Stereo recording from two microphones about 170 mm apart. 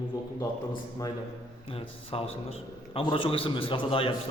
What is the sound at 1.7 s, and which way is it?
A man's voice, 35° left (ahead or behind).